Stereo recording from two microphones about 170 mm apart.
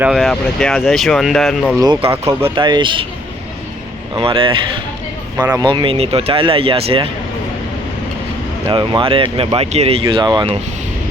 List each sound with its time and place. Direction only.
0.0 s speech: centre (ahead or behind)
1.8 s speech: 25° right (ahead or behind)
4.1 s speech: 30° right (ahead or behind)
8.7 s speech: 30° right (ahead or behind)